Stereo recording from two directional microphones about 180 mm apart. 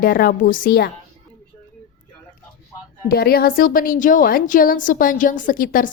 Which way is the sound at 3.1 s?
60° left (ahead or behind).